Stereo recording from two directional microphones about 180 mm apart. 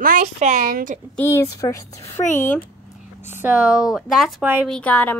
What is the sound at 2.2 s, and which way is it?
Speech, 45° left (ahead or behind).